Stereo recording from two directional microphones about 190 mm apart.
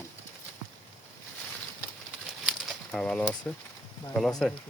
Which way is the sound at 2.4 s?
Centre (ahead or behind).